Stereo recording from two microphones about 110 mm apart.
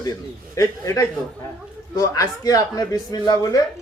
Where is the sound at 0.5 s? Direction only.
30° left (ahead or behind).